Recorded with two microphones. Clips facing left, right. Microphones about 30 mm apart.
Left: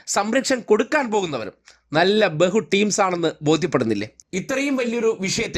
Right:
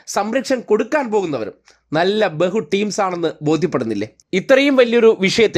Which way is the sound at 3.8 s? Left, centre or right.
Left.